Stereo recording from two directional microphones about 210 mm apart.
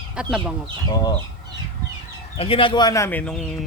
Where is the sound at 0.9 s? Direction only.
20° left (ahead or behind).